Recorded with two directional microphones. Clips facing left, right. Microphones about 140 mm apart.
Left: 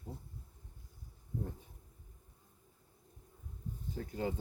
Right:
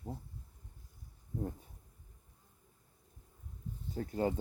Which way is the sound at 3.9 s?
45° right (ahead or behind).